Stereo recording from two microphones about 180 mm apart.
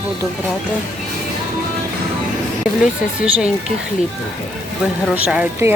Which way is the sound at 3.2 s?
5° right (ahead or behind).